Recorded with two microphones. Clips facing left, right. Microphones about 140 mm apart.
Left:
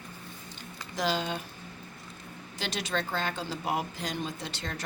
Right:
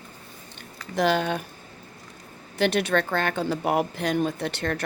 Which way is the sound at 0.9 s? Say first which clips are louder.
Right 7 dB; 60° right (ahead or behind).